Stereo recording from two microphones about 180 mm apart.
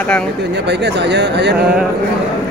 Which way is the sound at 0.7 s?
70° right (ahead or behind).